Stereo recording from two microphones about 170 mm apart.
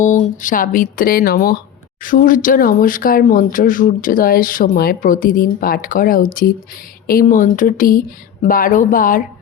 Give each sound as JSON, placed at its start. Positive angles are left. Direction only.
{"t": 0.0, "sound": "speech", "side_deg": 45}